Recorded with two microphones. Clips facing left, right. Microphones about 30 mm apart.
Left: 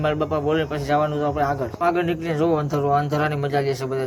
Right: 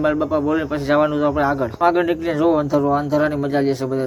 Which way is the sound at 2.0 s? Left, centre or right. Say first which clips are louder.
Right 4 dB; centre.